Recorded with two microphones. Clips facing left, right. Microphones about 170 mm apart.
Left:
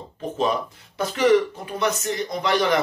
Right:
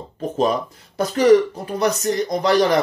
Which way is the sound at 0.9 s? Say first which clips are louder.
Right 4 dB; 40° right (ahead or behind).